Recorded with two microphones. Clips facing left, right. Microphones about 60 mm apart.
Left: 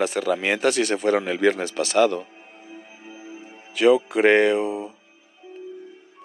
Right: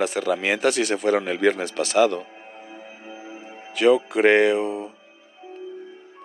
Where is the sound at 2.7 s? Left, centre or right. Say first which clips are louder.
Even; right.